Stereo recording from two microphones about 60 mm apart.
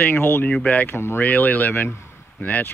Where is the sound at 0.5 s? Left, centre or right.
Left.